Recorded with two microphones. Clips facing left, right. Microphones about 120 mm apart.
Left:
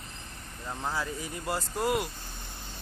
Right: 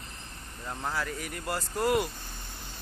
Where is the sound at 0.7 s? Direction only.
5° left (ahead or behind).